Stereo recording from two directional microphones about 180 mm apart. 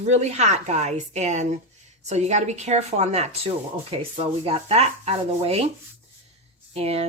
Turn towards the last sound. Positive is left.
turn(degrees=-35)  # may be behind; listen again after turning